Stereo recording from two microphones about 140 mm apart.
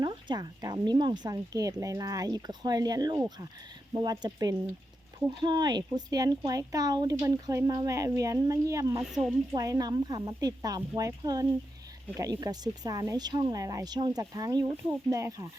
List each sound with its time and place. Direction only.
0.0 s speech: 30° right (ahead or behind)